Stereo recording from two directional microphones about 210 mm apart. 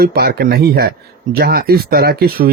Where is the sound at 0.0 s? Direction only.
50° right (ahead or behind).